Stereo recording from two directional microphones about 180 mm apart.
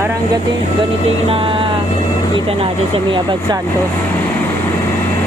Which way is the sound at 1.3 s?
30° right (ahead or behind).